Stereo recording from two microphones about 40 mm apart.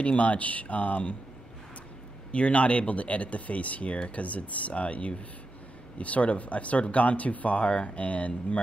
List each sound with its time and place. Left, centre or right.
0.0 s speech: left
2.3 s speech: left